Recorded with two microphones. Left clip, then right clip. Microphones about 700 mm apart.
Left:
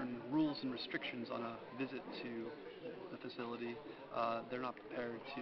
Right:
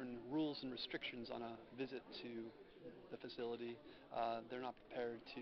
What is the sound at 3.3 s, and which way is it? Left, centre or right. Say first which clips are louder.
A man's voice: left 1 dB; right.